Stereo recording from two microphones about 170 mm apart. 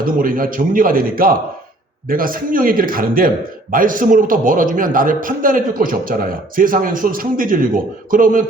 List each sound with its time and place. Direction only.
0.0 s a man's voice: 55° right (ahead or behind)